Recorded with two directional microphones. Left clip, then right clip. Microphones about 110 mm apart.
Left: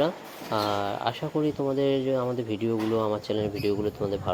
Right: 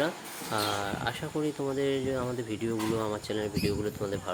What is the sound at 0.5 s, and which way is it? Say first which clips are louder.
Speech: left 4 dB; 25° left (ahead or behind).